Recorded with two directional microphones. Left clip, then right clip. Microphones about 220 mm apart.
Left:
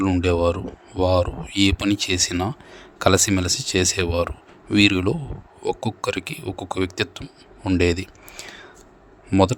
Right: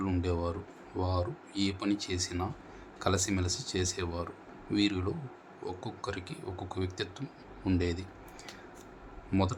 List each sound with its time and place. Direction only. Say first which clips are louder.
0.0 s speech: left 14 dB; 40° left (ahead or behind)